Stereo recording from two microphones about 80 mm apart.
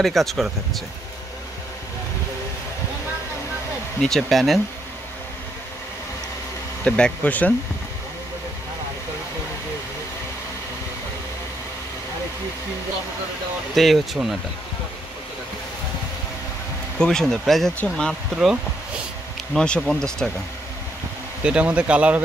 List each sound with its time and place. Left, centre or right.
0.0 s speech: centre
4.0 s speech: centre
6.8 s speech: centre
13.7 s speech: centre
17.0 s speech: centre
19.5 s speech: centre
21.4 s speech: centre